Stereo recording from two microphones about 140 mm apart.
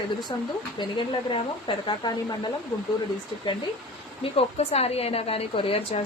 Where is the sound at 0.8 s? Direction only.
35° left (ahead or behind).